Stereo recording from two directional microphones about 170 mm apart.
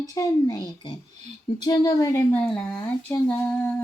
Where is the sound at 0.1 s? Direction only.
20° left (ahead or behind).